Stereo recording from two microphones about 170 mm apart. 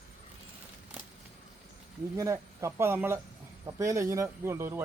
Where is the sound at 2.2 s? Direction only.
20° right (ahead or behind).